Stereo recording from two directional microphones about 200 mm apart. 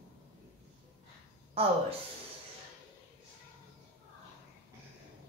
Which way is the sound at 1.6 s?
30° right (ahead or behind).